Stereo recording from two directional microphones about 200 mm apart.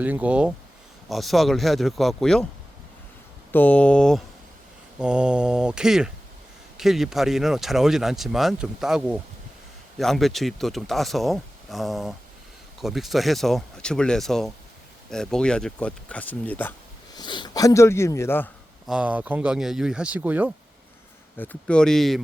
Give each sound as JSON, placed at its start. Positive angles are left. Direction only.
{"t": 0.0, "sound": "speech", "side_deg": -5}
{"t": 3.5, "sound": "speech", "side_deg": 10}
{"t": 17.2, "sound": "speech", "side_deg": 20}
{"t": 18.9, "sound": "speech", "side_deg": -5}
{"t": 21.3, "sound": "speech", "side_deg": 10}